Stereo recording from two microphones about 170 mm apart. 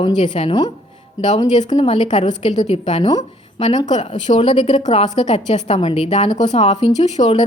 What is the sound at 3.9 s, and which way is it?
A woman's voice, 45° left (ahead or behind).